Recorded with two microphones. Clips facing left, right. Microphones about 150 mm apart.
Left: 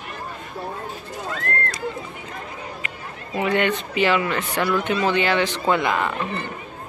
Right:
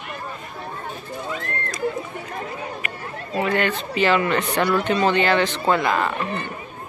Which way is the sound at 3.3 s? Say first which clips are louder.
Left 1 dB; 15° left (ahead or behind).